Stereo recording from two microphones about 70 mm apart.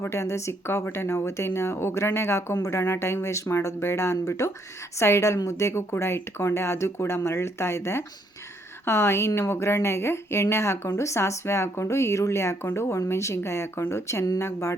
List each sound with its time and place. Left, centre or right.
0.0 s a woman's voice: left